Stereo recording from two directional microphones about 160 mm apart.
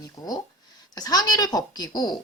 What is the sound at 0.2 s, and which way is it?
Speech, 25° left (ahead or behind).